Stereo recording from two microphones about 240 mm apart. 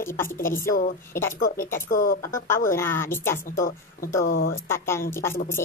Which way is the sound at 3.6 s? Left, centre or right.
Left.